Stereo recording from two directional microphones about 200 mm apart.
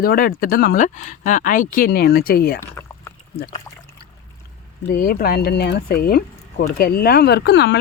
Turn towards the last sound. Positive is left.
turn(degrees=60)  # may be behind; listen again after turning